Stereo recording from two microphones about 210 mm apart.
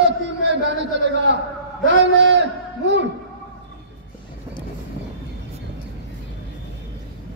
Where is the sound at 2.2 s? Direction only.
55° right (ahead or behind).